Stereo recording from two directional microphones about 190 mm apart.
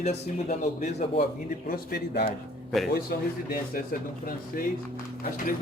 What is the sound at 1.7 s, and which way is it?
A man's voice, 55° left (ahead or behind).